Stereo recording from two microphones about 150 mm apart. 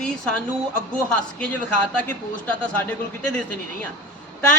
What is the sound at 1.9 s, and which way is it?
Speech, 10° left (ahead or behind).